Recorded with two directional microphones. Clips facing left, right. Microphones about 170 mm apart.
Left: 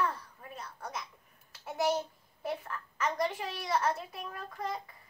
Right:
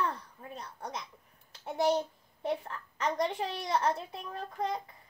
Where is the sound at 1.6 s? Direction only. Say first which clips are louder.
Right 2 dB; 35° right (ahead or behind).